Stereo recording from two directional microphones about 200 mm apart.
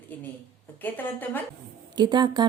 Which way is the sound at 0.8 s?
10° left (ahead or behind).